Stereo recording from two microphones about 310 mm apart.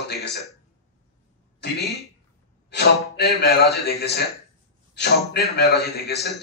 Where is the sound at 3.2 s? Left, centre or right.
Left.